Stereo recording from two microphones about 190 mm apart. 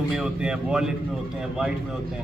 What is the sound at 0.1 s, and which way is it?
A man's voice, 5° right (ahead or behind).